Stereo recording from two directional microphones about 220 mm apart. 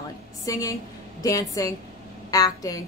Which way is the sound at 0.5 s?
15° left (ahead or behind).